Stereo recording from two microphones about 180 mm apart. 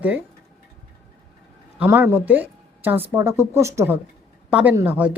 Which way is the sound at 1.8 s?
10° right (ahead or behind).